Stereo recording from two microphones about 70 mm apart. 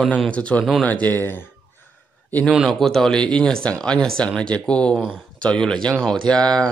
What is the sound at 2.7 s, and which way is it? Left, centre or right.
Speech, centre.